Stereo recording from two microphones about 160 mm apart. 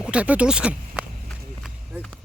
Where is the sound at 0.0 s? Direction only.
5° right (ahead or behind).